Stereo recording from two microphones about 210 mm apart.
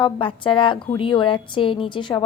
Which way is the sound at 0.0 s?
25° left (ahead or behind).